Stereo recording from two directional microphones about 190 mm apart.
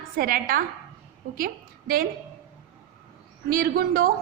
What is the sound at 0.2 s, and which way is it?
Speech, 50° right (ahead or behind).